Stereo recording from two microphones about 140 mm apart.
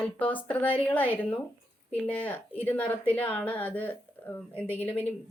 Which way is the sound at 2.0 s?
10° left (ahead or behind).